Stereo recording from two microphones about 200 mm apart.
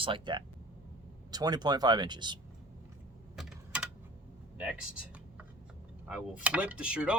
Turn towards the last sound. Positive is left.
turn(degrees=-5)  # may be behind; listen again after turning